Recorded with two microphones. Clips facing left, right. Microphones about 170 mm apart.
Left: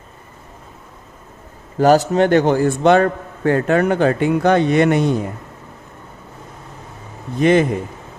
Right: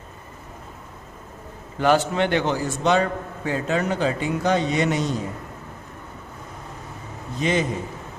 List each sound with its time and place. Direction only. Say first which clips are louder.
1.8 s a man's voice: left 7 dB; 40° left (ahead or behind); by 5.1 s 60° left (ahead or behind)
7.3 s a man's voice: left 9 dB; 60° left (ahead or behind)